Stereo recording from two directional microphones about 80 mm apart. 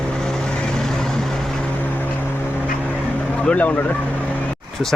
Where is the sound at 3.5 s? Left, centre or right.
Centre.